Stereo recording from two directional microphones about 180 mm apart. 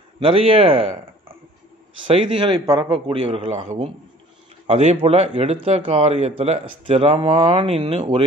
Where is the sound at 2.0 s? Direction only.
30° right (ahead or behind).